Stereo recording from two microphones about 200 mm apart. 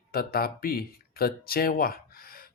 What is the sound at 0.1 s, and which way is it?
Speech, 50° left (ahead or behind).